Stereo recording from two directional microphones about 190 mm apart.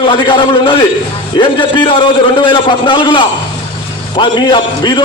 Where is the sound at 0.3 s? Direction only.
25° left (ahead or behind).